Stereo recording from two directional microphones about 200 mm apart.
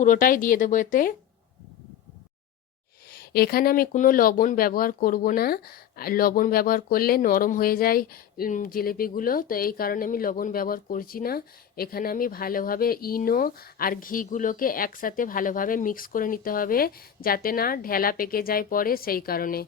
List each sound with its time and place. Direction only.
0.0 s speech: 40° left (ahead or behind)
3.1 s speech: 50° left (ahead or behind)